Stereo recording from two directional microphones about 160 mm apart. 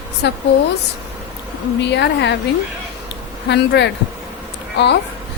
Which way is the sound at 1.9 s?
90° left.